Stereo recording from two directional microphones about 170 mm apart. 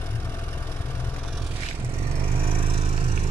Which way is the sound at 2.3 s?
35° right (ahead or behind).